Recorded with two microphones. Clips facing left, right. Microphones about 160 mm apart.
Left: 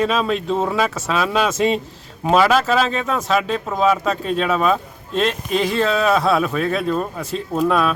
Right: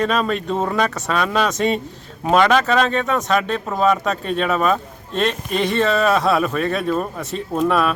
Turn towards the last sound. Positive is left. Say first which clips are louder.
# even
turn(degrees=0)  # may be behind; listen again after turning